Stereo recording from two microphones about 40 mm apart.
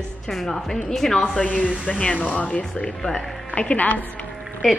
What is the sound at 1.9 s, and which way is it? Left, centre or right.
A woman's voice, left.